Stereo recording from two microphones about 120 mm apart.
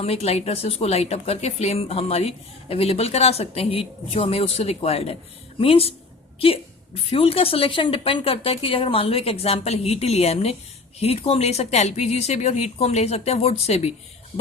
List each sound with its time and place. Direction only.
0.0 s a woman's voice: 55° left (ahead or behind)